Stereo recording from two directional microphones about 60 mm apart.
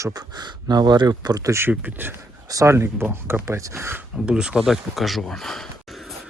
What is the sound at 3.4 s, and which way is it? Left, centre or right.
Speech, right.